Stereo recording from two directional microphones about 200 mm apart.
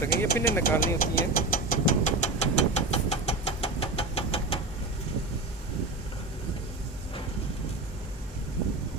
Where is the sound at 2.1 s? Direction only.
35° left (ahead or behind).